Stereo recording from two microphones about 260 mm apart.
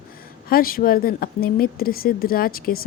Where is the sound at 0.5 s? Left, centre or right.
Left.